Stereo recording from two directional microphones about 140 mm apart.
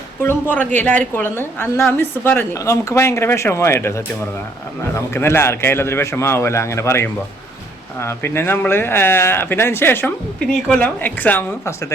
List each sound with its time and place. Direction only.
0.2 s a woman's voice: 15° left (ahead or behind)
10.4 s a woman's voice: 5° left (ahead or behind)